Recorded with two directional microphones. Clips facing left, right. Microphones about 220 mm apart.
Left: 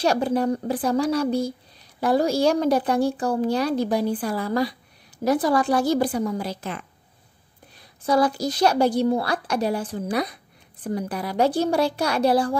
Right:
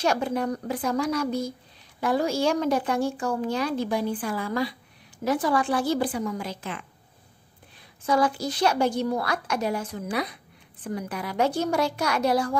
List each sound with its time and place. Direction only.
0.0 s a woman's voice: 35° left (ahead or behind)
8.0 s a woman's voice: 35° left (ahead or behind)